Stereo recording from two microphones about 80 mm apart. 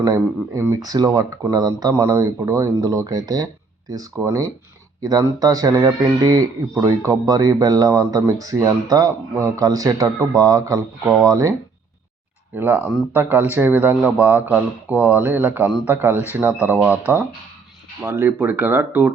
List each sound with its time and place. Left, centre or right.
0.0 s speech: right
12.5 s speech: right